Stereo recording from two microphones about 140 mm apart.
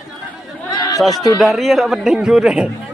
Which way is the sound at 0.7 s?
30° left (ahead or behind).